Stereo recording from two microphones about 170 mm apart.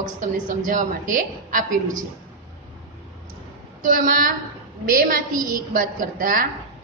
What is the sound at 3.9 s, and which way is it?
A woman's voice, 55° right (ahead or behind).